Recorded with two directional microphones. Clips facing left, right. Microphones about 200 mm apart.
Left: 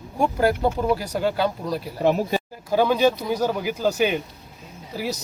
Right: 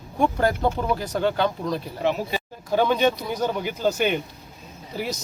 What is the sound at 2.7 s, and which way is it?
Speech, 5° left (ahead or behind).